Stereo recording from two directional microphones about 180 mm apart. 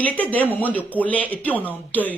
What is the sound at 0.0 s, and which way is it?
Speech, 10° left (ahead or behind).